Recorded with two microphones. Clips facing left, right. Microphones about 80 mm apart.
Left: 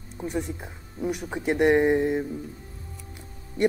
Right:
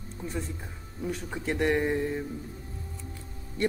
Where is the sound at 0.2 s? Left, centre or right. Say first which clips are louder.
Left 6 dB; centre.